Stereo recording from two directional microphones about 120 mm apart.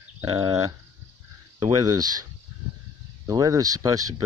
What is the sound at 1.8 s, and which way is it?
Speech, 35° right (ahead or behind).